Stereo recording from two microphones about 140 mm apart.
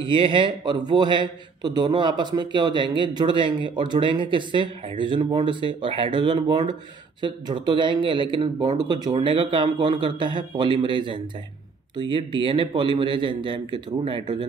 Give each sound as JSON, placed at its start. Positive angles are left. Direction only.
{"t": 0.0, "sound": "a man's voice", "side_deg": -35}